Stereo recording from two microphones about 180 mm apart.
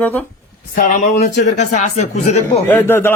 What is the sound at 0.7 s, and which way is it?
Speech, 45° left (ahead or behind).